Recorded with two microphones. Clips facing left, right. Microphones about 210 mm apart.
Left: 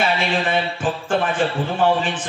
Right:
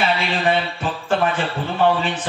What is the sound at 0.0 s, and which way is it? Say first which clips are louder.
A man's voice: even; 50° left (ahead or behind).